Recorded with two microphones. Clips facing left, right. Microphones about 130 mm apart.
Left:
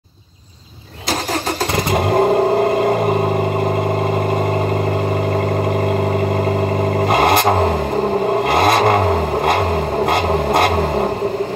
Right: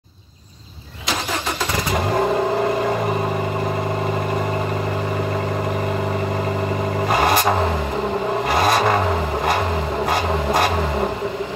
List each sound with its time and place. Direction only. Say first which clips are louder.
2.0 s vehicle: left 5 dB; 45° left (ahead or behind)
7.1 s vehicle: left 3 dB; 60° left (ahead or behind)
8.5 s vehicle: left 3 dB; 55° left (ahead or behind)